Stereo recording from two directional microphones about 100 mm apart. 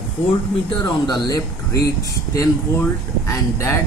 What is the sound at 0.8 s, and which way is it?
Speech, 40° left (ahead or behind).